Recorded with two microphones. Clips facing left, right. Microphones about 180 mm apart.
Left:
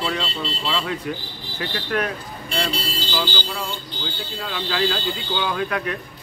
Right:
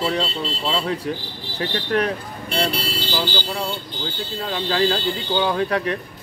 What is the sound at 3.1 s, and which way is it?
Speech, 35° right (ahead or behind).